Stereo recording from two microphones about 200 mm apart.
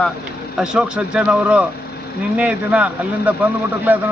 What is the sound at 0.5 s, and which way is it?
Speech, 5° right (ahead or behind).